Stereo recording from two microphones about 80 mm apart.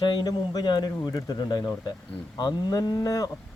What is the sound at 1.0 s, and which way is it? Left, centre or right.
Speech, left.